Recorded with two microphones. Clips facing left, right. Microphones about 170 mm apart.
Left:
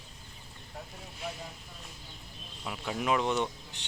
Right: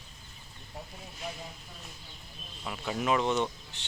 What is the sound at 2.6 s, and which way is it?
Speech, centre (ahead or behind).